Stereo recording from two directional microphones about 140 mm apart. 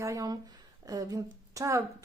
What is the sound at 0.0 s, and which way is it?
A woman's voice, 25° right (ahead or behind).